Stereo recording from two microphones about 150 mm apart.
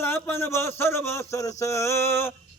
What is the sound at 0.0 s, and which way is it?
Speech, 15° left (ahead or behind).